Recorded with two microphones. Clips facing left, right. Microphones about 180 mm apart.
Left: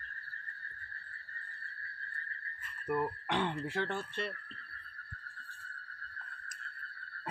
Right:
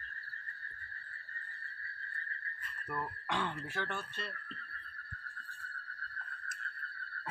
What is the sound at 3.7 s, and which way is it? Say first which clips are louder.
Speech: left 5 dB; 30° left (ahead or behind).